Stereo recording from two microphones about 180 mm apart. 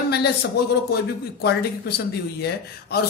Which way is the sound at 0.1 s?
65° left (ahead or behind).